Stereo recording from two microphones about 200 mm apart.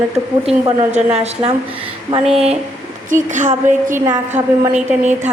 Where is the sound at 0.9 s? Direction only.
30° right (ahead or behind).